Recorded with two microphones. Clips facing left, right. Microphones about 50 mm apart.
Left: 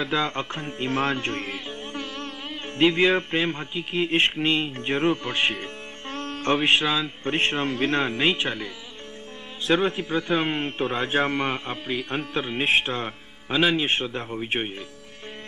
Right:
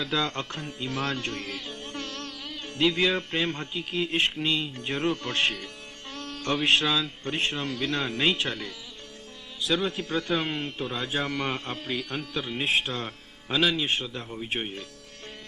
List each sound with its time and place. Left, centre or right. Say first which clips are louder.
0.0 s speech: left 3 dB; left
2.2 s speech: left 4 dB; left
5.6 s music: left 5 dB; left; by 7.1 s centre
7.2 s speech: left 5 dB; left
8.1 s speech: left 3 dB; left
9.7 s speech: left 5 dB; left
9.9 s speech: left 3 dB; centre; by 11.4 s left
11.4 s a man's voice: left 3 dB; centre
12.1 s speech: left 4 dB; left